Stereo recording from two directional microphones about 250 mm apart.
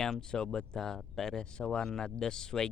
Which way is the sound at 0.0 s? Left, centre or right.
Centre.